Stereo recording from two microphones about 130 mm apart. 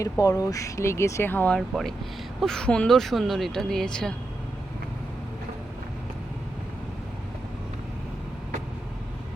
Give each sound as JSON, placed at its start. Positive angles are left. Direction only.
{"t": 0.0, "sound": "speech", "side_deg": 25}